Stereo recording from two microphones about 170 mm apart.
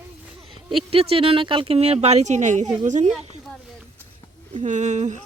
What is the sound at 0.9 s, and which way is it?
Speech, 35° right (ahead or behind).